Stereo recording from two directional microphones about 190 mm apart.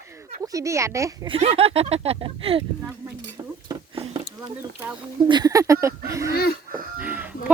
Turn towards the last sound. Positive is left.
turn(degrees=-10)  # may be behind; listen again after turning